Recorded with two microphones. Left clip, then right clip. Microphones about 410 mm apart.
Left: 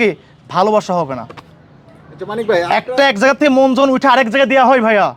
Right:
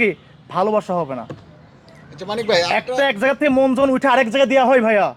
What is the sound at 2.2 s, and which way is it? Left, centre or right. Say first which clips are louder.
Speech: left 2 dB; right.